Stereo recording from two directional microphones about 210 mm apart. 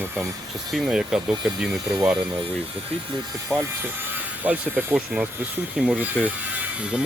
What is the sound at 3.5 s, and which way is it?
Speech, 10° right (ahead or behind).